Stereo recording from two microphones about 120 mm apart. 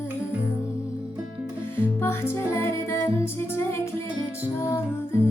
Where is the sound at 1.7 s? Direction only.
20° left (ahead or behind).